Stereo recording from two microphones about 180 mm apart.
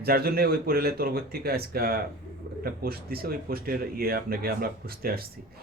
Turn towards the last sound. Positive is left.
turn(degrees=-55)  # may be behind; listen again after turning